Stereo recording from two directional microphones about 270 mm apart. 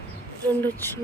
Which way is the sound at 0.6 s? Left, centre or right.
Centre.